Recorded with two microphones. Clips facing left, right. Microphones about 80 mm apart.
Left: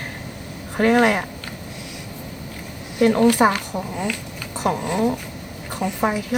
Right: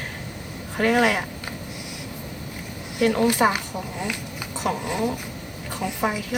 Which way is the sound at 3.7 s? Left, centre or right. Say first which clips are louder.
Left 4 dB; left.